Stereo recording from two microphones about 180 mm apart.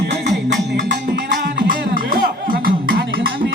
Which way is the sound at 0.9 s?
70° right (ahead or behind).